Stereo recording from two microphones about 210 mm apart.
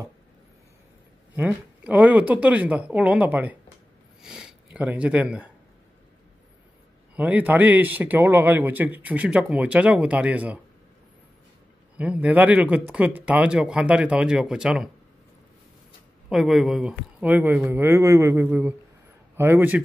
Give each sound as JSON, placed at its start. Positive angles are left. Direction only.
{"t": 1.3, "sound": "a man's voice", "side_deg": -10}
{"t": 7.2, "sound": "a man's voice", "side_deg": -5}
{"t": 12.0, "sound": "speech", "side_deg": -5}
{"t": 16.3, "sound": "a man's voice", "side_deg": 0}